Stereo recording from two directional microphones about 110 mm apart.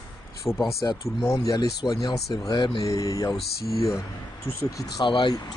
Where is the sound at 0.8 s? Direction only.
30° left (ahead or behind).